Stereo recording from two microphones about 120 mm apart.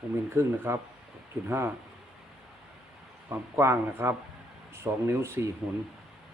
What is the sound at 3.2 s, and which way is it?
Speech, 20° right (ahead or behind).